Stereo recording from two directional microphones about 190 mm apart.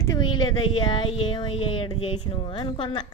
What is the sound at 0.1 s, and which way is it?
Speech, 20° left (ahead or behind).